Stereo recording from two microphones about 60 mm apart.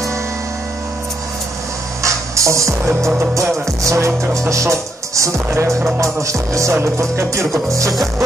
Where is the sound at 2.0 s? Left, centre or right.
Right.